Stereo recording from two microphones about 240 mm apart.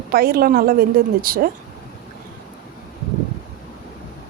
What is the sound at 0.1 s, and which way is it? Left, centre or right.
A woman's voice, right.